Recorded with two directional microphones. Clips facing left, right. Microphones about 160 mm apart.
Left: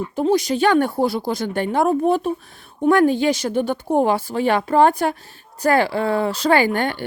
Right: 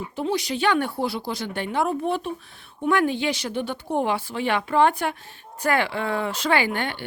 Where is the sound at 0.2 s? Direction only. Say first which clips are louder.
Left 7 dB; 45° left (ahead or behind).